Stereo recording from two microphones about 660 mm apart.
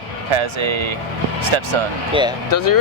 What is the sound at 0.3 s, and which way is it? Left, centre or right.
Speech, right.